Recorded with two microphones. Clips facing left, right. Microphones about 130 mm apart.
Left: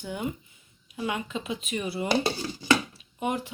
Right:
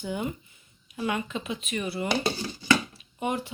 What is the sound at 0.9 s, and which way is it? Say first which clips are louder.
Speech: right 1 dB; 10° left (ahead or behind).